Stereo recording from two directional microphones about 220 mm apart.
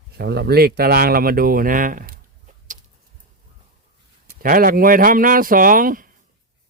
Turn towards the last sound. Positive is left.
turn(degrees=-40)  # may be behind; listen again after turning